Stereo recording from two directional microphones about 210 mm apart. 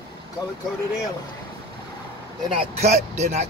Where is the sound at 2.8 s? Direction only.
30° right (ahead or behind).